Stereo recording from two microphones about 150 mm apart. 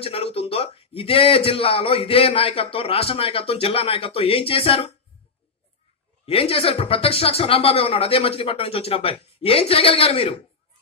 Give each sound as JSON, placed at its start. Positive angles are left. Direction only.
{"t": 0.0, "sound": "a man's voice", "side_deg": 40}
{"t": 6.2, "sound": "a man's voice", "side_deg": 40}